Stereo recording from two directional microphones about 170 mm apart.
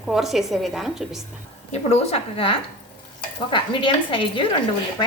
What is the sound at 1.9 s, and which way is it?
A woman's voice, 35° left (ahead or behind).